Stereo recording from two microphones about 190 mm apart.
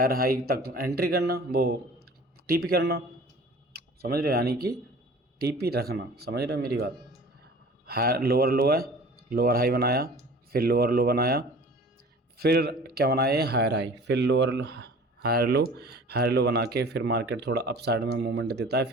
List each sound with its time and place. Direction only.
0.0 s speech: 50° right (ahead or behind); by 14.7 s 70° right (ahead or behind)
15.2 s speech: 55° right (ahead or behind)